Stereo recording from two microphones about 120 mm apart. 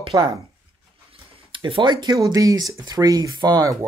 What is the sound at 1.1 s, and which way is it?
Speech, 45° right (ahead or behind).